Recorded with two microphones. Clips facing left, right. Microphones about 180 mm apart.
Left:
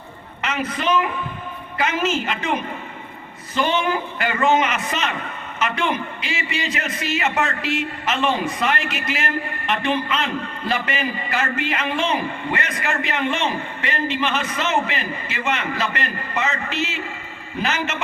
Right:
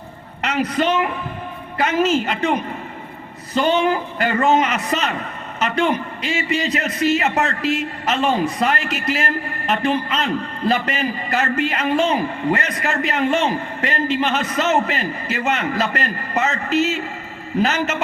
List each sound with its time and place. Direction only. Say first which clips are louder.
0.4 s a man's voice: right 4 dB; 35° right (ahead or behind)